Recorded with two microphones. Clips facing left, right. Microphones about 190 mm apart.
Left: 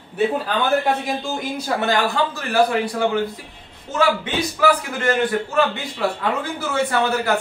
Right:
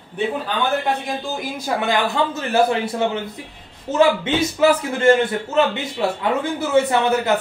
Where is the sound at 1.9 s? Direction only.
20° right (ahead or behind).